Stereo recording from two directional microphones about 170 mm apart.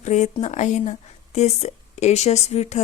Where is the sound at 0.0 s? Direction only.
45° left (ahead or behind).